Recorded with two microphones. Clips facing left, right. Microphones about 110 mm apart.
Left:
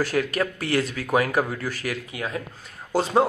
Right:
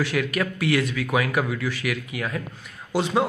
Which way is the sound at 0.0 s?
35° left (ahead or behind).